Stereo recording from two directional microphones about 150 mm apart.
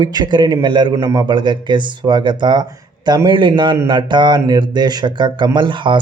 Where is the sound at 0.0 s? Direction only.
25° right (ahead or behind).